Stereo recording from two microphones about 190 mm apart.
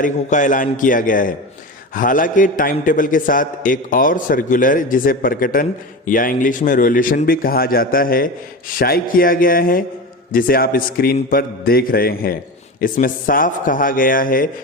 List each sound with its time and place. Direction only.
0.0 s a man's voice: 40° left (ahead or behind)